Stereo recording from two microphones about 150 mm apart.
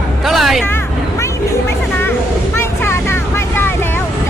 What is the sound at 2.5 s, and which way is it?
Vehicle, 15° left (ahead or behind).